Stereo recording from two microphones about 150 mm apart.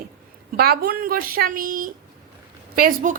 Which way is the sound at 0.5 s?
90° right.